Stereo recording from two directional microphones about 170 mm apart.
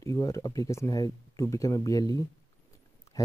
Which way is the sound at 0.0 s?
20° left (ahead or behind).